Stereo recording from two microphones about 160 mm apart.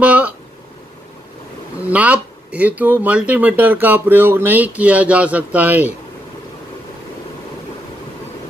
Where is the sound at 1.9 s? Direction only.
10° right (ahead or behind).